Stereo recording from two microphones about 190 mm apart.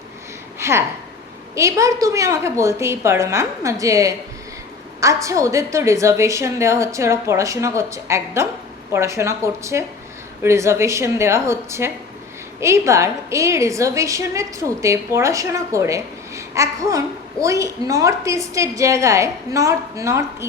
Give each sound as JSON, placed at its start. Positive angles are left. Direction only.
{"t": 0.6, "sound": "a woman's voice", "side_deg": -15}